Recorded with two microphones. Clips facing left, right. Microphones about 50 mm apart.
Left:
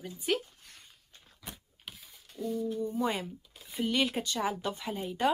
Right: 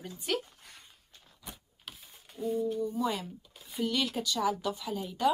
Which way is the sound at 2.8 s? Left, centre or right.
Left.